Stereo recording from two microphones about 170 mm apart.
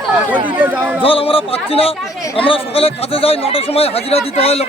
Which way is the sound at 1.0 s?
35° left (ahead or behind).